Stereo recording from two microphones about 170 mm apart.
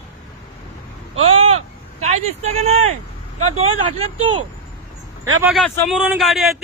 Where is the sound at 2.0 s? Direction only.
40° right (ahead or behind).